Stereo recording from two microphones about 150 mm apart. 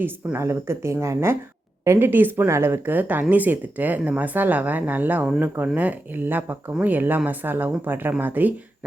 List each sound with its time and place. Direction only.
0.0 s speech: 15° right (ahead or behind)